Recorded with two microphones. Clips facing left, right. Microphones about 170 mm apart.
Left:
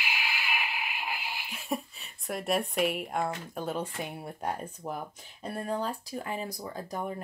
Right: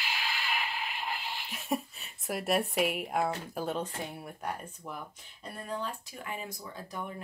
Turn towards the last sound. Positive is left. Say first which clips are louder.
# left 5 dB
turn(degrees=40)  # may be behind; listen again after turning